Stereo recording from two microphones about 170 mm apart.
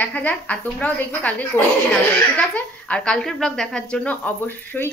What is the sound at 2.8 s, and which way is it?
Speech, 5° left (ahead or behind).